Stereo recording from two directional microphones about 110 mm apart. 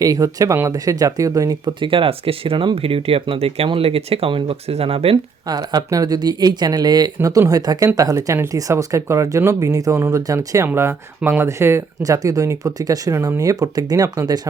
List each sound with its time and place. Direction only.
0.0 s speech: 30° right (ahead or behind)
1.8 s speech: 50° right (ahead or behind)
5.1 s speech: 35° right (ahead or behind)
10.7 s speech: 20° right (ahead or behind); by 14.4 s 35° right (ahead or behind)